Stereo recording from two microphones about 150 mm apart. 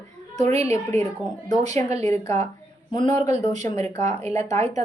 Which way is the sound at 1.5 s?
50° right (ahead or behind).